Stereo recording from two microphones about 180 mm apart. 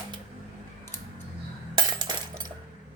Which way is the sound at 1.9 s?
25° right (ahead or behind).